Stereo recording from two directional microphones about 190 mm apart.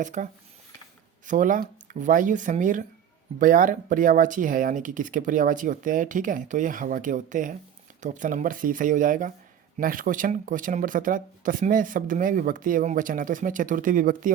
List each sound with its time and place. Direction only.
0.0 s speech: 40° right (ahead or behind)
1.3 s speech: 45° right (ahead or behind)